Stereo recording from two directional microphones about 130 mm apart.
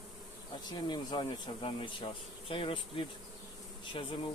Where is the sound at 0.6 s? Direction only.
35° left (ahead or behind).